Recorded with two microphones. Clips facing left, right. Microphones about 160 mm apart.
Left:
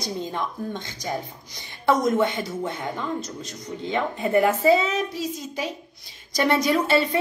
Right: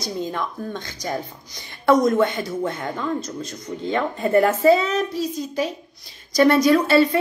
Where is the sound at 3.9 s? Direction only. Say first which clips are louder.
Right 3 dB; 15° left (ahead or behind).